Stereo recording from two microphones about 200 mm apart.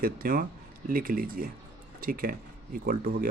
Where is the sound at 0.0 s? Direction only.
45° right (ahead or behind).